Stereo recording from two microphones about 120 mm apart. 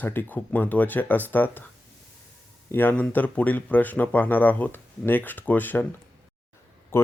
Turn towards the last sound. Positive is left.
turn(degrees=20)  # may be behind; listen again after turning